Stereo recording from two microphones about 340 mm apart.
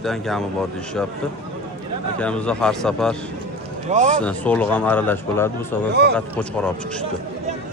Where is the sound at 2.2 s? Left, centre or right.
Centre.